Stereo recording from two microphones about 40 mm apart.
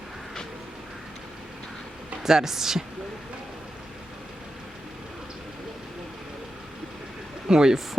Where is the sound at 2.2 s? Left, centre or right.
Centre.